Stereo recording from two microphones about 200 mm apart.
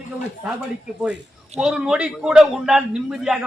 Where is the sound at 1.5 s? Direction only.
5° right (ahead or behind).